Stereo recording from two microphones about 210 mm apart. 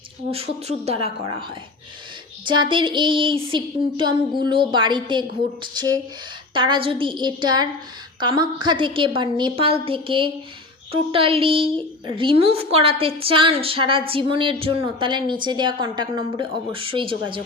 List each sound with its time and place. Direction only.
0.3 s a woman's voice: 30° right (ahead or behind)